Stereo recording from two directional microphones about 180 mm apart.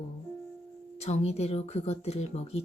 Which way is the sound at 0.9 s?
35° left (ahead or behind).